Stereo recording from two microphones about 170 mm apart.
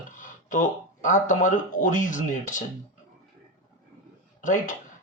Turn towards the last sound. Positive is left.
turn(degrees=50)  # may be behind; listen again after turning